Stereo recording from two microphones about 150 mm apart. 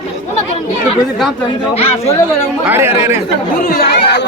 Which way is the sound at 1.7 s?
45° left (ahead or behind).